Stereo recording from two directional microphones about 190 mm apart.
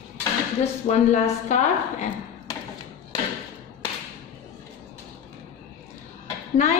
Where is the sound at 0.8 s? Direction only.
35° left (ahead or behind).